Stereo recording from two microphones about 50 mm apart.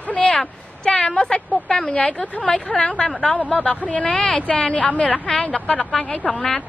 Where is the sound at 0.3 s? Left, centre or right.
Centre.